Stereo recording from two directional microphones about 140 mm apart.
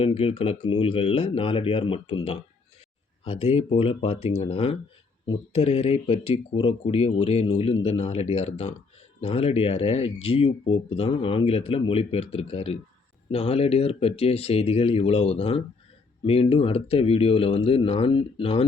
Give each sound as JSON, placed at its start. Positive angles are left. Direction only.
{"t": 0.0, "sound": "speech", "side_deg": 45}
{"t": 5.2, "sound": "speech", "side_deg": 35}
{"t": 5.6, "sound": "speech", "side_deg": 50}